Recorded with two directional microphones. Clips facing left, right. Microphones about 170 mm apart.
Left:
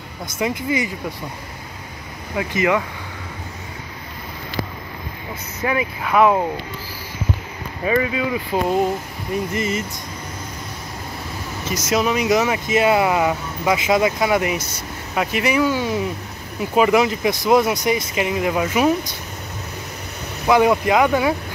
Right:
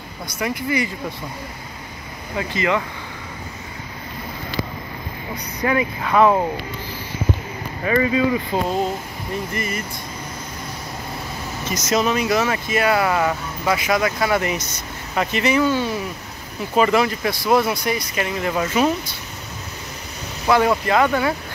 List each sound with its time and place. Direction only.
0.4 s speech: 20° left (ahead or behind)
2.3 s speech: 15° left (ahead or behind)
5.3 s speech: 5° left (ahead or behind)
7.8 s speech: 10° left (ahead or behind)
9.5 s speech: 25° left (ahead or behind)
11.7 s speech: 10° left (ahead or behind)
20.4 s speech: 15° left (ahead or behind)